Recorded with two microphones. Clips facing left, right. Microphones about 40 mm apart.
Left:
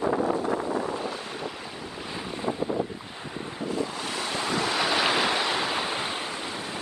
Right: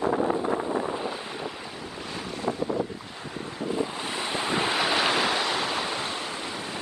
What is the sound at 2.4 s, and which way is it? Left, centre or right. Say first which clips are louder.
Boat: even; left.